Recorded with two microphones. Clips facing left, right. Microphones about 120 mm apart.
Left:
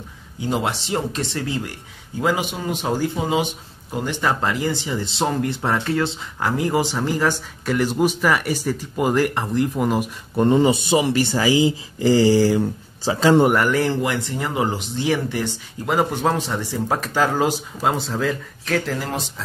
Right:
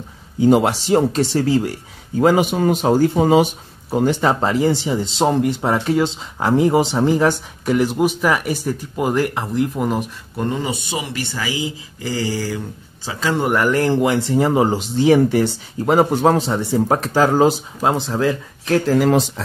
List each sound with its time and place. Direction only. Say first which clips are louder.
0.7 s speech: right 8 dB; 40° right (ahead or behind)
4.2 s speech: right 5 dB; 30° right (ahead or behind)
5.4 s speech: right 4 dB; 10° right (ahead or behind)
6.4 s speech: right 6 dB; 25° right (ahead or behind)
7.2 s speech: right 4 dB; 10° right (ahead or behind)
10.3 s speech: left 7 dB; 25° left (ahead or behind)
13.5 s speech: right 1 dB; centre (ahead or behind)
14.0 s speech: right 7 dB; 35° right (ahead or behind)
17.8 s speech: right 3 dB; 20° right (ahead or behind)
18.9 s speech: right 12 dB; 85° right